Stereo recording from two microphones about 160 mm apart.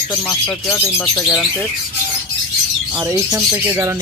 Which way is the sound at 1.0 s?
Centre (ahead or behind).